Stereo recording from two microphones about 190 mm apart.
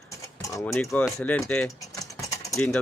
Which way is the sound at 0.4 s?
15° left (ahead or behind).